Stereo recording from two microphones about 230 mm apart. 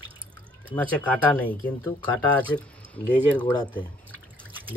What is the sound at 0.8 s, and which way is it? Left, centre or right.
Speech, centre.